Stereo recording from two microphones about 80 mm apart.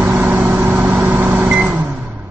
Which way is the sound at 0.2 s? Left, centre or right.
Right.